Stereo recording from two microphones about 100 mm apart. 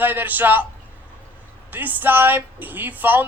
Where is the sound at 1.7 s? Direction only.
20° right (ahead or behind).